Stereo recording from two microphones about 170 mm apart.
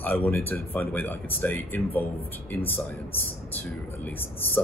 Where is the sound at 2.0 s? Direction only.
65° left (ahead or behind).